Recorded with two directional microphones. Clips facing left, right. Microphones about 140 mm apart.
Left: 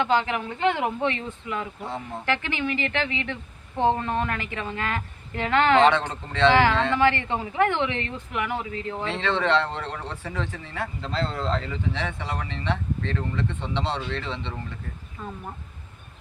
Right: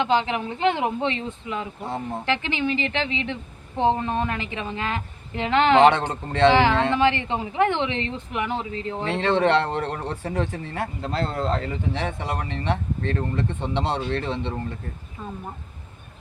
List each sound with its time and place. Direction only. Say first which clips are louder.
0.0 s a woman's voice: right 1 dB; 20° right (ahead or behind)
6.2 s speech: right 3 dB; 50° right (ahead or behind)
6.5 s a woman's voice: right 1 dB; 20° right (ahead or behind)
9.0 s speech: right 4 dB; 50° right (ahead or behind)
15.2 s a woman's voice: right 1 dB; 20° right (ahead or behind)